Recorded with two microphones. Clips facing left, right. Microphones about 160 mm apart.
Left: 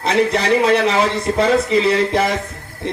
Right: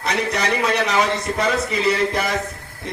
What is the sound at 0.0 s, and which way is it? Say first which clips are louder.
A man's voice: left 6 dB; 25° left (ahead or behind).